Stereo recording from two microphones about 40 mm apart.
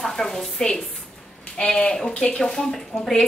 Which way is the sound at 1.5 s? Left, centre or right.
Left.